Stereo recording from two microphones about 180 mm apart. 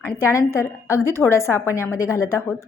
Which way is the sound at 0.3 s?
15° left (ahead or behind).